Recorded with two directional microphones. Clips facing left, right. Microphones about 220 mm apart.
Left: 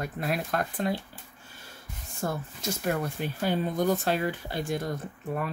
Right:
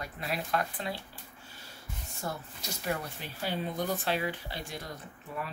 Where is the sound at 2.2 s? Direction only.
50° left (ahead or behind).